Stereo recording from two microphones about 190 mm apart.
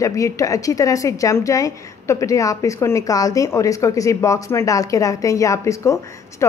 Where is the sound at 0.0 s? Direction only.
15° left (ahead or behind).